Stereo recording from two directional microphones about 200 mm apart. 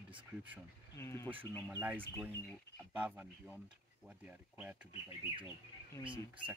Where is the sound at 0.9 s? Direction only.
15° left (ahead or behind).